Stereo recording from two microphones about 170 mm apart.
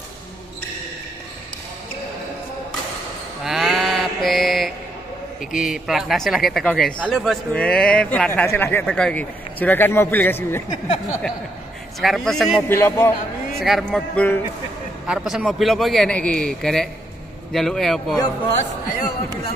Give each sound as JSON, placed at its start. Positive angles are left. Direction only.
{"t": 3.4, "sound": "mantra", "side_deg": 0}
{"t": 5.4, "sound": "speech", "side_deg": 0}
{"t": 12.0, "sound": "speech", "side_deg": 0}
{"t": 12.6, "sound": "a man's voice", "side_deg": 15}
{"t": 13.6, "sound": "speech", "side_deg": 0}
{"t": 15.0, "sound": "speech", "side_deg": 0}
{"t": 19.0, "sound": "a man's voice", "side_deg": 15}